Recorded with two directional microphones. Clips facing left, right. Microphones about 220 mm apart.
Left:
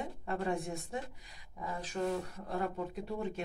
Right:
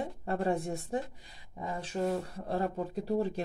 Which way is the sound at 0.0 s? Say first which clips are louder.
Right 4 dB; 35° right (ahead or behind).